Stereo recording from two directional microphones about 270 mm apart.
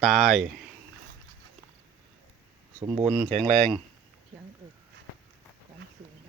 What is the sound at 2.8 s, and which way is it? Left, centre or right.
Speech, centre.